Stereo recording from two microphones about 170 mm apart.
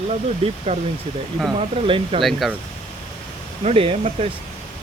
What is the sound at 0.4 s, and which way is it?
Speech, 40° right (ahead or behind).